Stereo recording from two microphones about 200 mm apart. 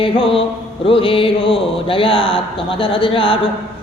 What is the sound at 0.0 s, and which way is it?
Speech, 25° left (ahead or behind).